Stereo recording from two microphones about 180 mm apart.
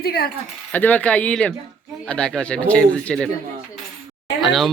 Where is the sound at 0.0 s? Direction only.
60° left (ahead or behind).